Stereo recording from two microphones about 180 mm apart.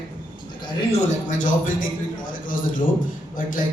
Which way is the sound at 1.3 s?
45° left (ahead or behind).